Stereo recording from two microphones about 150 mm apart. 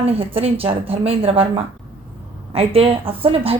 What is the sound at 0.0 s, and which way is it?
A woman's voice, 40° right (ahead or behind).